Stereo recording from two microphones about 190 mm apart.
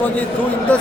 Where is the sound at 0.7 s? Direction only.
5° left (ahead or behind).